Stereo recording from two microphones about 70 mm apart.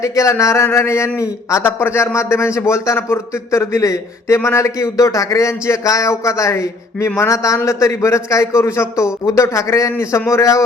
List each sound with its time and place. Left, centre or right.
0.0 s a man's voice: left